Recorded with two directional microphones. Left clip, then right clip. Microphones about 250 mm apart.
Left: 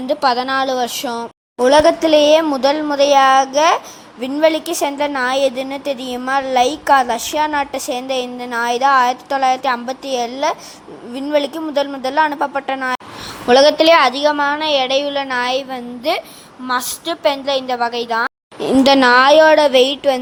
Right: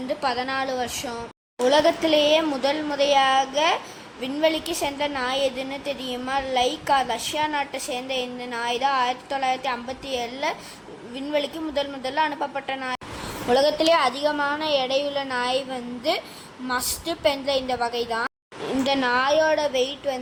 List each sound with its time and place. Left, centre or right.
0.1 s a woman's voice: left
18.8 s a woman's voice: left